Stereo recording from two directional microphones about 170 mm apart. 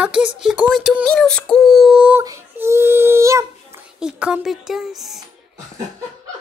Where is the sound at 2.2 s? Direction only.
15° right (ahead or behind).